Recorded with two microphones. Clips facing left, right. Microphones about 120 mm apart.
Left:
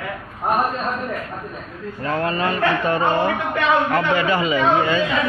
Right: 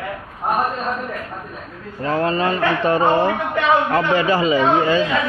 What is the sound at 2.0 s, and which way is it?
A man's voice, 30° right (ahead or behind).